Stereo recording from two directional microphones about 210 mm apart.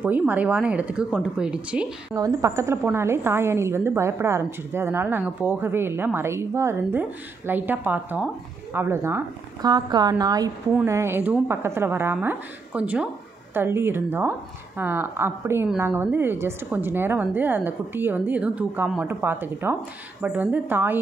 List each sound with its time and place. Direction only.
0.0 s speech: 10° right (ahead or behind)
2.1 s a woman's voice: 15° right (ahead or behind)